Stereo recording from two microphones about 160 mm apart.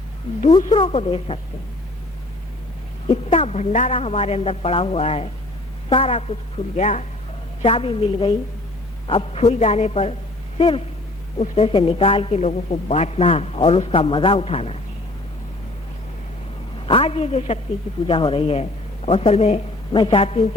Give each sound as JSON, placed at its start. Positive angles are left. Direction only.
{"t": 0.7, "sound": "speech", "side_deg": 35}
{"t": 3.1, "sound": "speech", "side_deg": 40}
{"t": 6.7, "sound": "speech", "side_deg": 50}
{"t": 7.6, "sound": "speech", "side_deg": 35}
{"t": 16.8, "sound": "speech", "side_deg": 35}
{"t": 19.9, "sound": "speech", "side_deg": 30}